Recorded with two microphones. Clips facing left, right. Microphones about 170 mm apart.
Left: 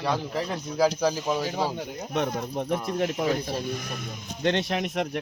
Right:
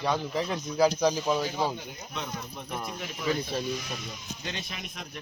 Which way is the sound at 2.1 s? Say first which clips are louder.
Left 10 dB; 60° left (ahead or behind).